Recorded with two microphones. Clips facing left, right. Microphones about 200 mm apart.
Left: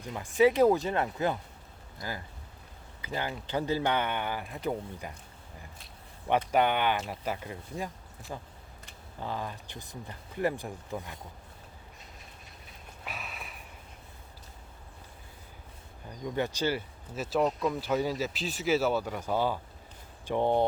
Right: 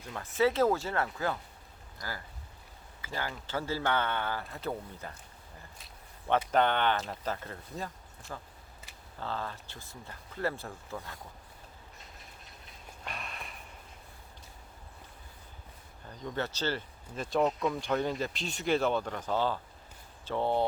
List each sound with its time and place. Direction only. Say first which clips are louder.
0.1 s speech: left 4 dB; 15° left (ahead or behind)
6.5 s speech: left 1 dB; 10° left (ahead or behind)
13.1 s a sound: even; 5° left (ahead or behind)
16.0 s speech: left 4 dB; 15° left (ahead or behind)